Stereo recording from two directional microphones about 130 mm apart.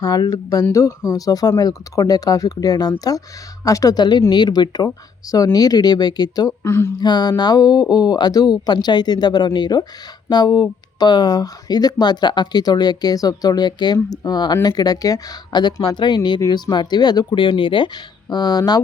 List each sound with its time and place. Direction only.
0.0 s speech: 30° left (ahead or behind)
7.0 s speech: 35° left (ahead or behind)